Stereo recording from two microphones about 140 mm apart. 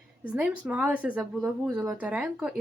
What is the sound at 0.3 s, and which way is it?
Speech, 10° right (ahead or behind).